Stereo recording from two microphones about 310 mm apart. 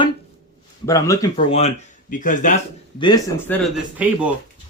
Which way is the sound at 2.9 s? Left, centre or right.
Centre.